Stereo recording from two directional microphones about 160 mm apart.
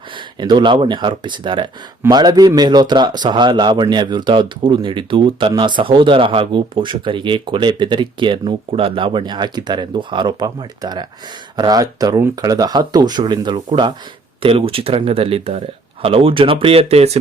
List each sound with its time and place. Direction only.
0.3 s speech: 30° right (ahead or behind)